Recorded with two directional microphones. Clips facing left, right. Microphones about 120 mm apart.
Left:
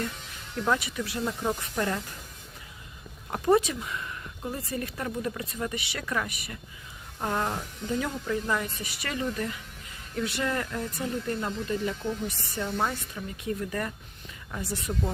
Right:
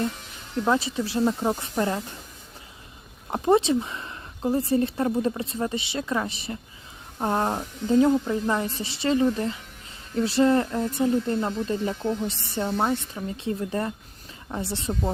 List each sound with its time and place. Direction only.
0.6 s speech: 25° right (ahead or behind)
3.2 s speech: 25° right (ahead or behind)